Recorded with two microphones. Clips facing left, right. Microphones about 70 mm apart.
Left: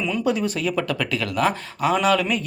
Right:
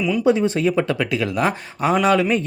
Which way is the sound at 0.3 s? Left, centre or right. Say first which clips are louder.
Right 7 dB; right.